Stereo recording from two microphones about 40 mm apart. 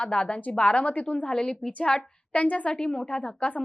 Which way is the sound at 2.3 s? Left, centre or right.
Left.